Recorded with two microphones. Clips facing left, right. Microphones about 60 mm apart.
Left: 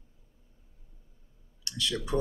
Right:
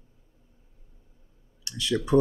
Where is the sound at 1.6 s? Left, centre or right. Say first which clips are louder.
Right 6 dB; right.